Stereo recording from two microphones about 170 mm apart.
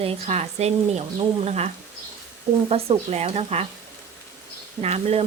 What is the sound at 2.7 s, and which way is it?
Speech, 35° right (ahead or behind).